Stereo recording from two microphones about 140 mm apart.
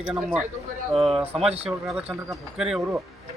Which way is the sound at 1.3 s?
45° right (ahead or behind).